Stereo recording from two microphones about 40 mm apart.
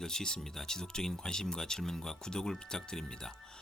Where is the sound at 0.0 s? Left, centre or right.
Centre.